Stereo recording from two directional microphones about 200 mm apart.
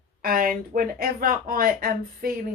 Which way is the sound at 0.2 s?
45° right (ahead or behind).